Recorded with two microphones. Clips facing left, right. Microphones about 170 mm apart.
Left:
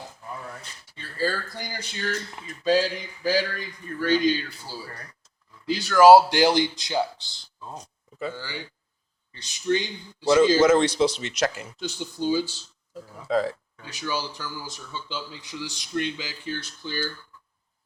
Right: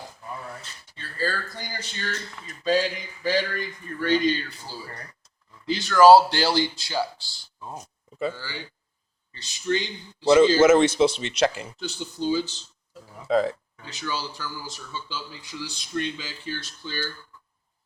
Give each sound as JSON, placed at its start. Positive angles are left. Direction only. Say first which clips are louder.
{"t": 0.6, "sound": "speech", "louder": "even", "side_deg": 15}
{"t": 5.6, "sound": "speech", "louder": "even", "side_deg": 5}
{"t": 7.6, "sound": "speech", "louder": "right 1 dB", "side_deg": -10}
{"t": 8.4, "sound": "speech", "louder": "left 1 dB", "side_deg": 15}
{"t": 10.6, "sound": "speech", "louder": "right 2 dB", "side_deg": -25}
{"t": 11.8, "sound": "speech", "louder": "left 1 dB", "side_deg": 10}
{"t": 13.2, "sound": "speech", "louder": "right 2 dB", "side_deg": -20}
{"t": 13.8, "sound": "speech", "louder": "left 1 dB", "side_deg": 15}